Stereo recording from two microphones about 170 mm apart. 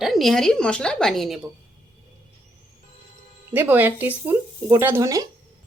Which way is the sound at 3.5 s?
10° right (ahead or behind).